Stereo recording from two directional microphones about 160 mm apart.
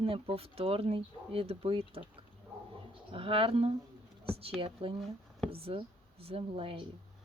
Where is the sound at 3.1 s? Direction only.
35° right (ahead or behind).